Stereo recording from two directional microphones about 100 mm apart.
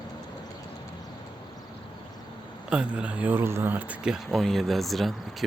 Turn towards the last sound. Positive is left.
turn(degrees=0)  # may be behind; listen again after turning